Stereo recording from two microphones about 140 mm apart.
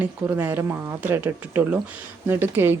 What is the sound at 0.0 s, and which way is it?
Speech, 15° right (ahead or behind).